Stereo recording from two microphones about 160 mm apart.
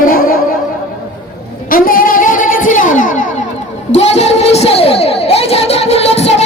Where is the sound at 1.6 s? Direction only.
60° left (ahead or behind).